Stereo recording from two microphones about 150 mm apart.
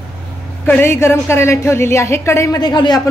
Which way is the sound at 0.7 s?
15° left (ahead or behind).